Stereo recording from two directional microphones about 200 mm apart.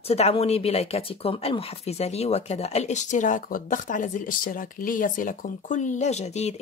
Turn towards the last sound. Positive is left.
turn(degrees=35)  # may be behind; listen again after turning